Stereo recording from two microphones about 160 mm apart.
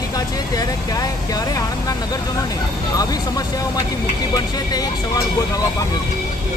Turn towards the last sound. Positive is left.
turn(degrees=25)  # may be behind; listen again after turning